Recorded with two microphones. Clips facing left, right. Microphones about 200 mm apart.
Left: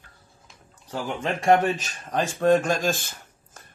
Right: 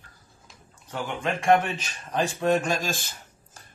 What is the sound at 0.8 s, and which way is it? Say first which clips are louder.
Speech: left 1 dB; 35° left (ahead or behind).